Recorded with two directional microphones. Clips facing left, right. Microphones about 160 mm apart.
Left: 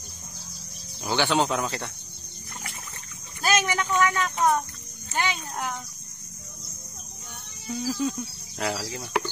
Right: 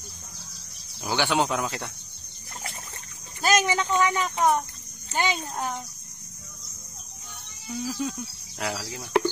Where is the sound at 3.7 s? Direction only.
25° right (ahead or behind).